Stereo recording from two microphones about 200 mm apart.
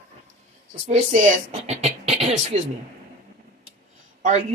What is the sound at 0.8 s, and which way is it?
A man's voice, 35° right (ahead or behind).